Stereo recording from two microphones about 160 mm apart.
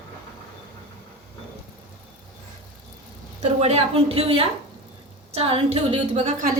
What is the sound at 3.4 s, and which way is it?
A woman's voice, 40° right (ahead or behind).